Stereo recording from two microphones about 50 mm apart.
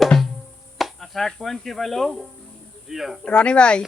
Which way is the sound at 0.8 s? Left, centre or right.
Centre.